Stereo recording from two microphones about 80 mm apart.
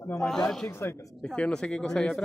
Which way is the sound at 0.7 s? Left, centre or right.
Left.